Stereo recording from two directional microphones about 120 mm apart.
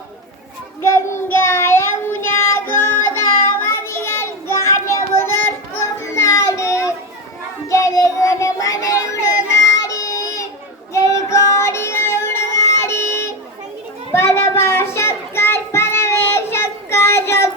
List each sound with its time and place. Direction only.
0.8 s child singing: 20° left (ahead or behind)
6.0 s children playing: 25° left (ahead or behind)
7.7 s child singing: 25° left (ahead or behind)